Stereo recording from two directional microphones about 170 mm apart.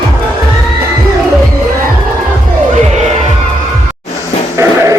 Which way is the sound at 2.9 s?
40° right (ahead or behind).